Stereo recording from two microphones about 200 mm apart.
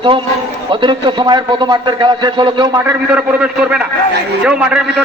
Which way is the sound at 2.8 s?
5° right (ahead or behind).